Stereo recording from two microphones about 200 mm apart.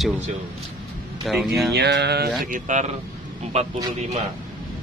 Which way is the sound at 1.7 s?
55° right (ahead or behind).